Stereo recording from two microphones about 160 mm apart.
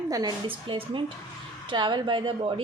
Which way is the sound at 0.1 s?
25° right (ahead or behind).